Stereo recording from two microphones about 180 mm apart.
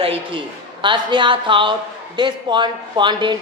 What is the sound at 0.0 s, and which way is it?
A woman's voice, 30° right (ahead or behind).